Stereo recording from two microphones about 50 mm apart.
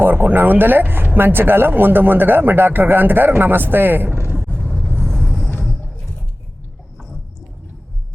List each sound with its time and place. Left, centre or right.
0.0 s speech: right
4.9 s vehicle: centre